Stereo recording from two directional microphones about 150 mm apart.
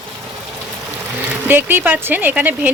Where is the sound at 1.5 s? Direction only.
15° right (ahead or behind).